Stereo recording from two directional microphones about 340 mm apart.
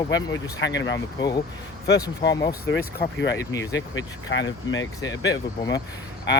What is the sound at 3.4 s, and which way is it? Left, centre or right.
Speech, centre.